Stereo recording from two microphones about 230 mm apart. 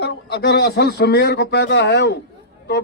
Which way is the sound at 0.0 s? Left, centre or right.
Left.